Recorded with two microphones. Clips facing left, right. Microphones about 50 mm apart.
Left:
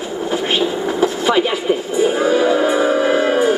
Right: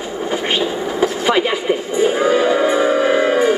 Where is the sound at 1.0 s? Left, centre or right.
Right.